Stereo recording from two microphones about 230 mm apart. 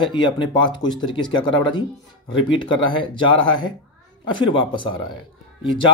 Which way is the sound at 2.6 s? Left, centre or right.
Left.